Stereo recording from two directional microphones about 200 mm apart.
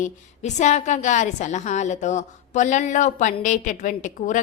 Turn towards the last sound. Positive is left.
turn(degrees=40)  # may be behind; listen again after turning